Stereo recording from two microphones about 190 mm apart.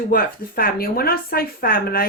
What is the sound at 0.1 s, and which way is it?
Speech, 50° left (ahead or behind).